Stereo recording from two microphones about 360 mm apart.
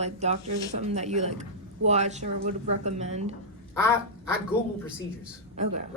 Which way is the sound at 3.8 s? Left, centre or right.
Centre.